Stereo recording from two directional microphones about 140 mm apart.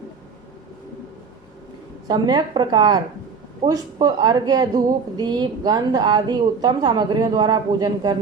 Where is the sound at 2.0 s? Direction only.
30° right (ahead or behind).